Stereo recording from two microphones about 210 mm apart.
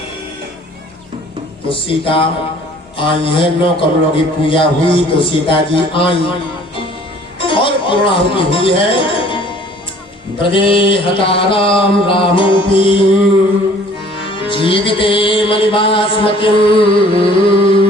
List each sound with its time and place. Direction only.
1.7 s a man's voice: 25° left (ahead or behind)
7.3 s music: 25° left (ahead or behind)
10.5 s a man's voice: 25° left (ahead or behind)
14.3 s music: 25° left (ahead or behind)